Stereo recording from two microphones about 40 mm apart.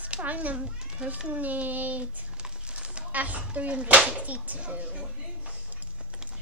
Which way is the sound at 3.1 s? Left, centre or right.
Right.